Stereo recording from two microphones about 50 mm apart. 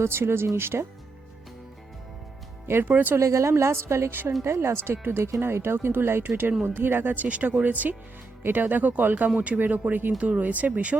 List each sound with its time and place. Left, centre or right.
0.0 s speech: right
2.6 s speech: right
3.2 s a woman's voice: right
6.2 s speech: right
7.3 s speech: right
10.1 s speech: right